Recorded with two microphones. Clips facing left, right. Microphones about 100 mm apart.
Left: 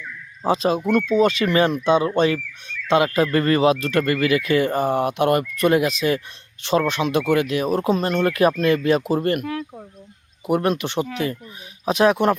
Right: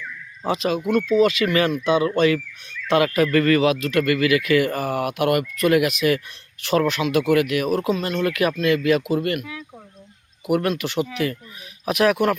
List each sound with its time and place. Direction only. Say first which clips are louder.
0.4 s speech: left 3 dB; 30° left (ahead or behind)
0.9 s speech: right 1 dB; 45° left (ahead or behind)
1.1 s speech: right 1 dB; 30° left (ahead or behind)
9.4 s speech: left 8 dB; 55° left (ahead or behind)
10.4 s speech: left 1 dB; 30° left (ahead or behind)